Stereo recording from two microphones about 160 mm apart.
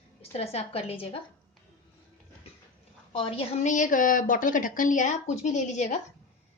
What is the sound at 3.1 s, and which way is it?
A woman's voice, 35° left (ahead or behind).